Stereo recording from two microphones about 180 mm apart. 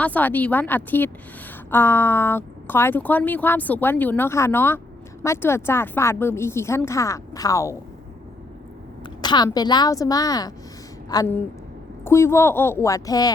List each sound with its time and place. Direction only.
0.0 s speech: 10° left (ahead or behind)
9.2 s a woman's voice: 25° left (ahead or behind)